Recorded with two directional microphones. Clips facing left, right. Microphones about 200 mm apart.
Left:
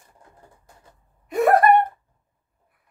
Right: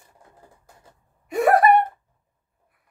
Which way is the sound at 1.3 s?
Centre (ahead or behind).